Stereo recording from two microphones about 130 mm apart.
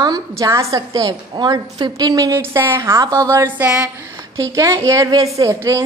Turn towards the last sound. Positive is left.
turn(degrees=-25)  # may be behind; listen again after turning